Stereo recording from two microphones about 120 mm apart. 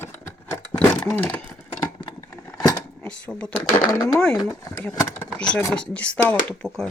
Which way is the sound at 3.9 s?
30° left (ahead or behind).